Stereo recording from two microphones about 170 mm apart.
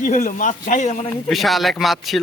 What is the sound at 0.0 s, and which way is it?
A man's voice, 45° left (ahead or behind).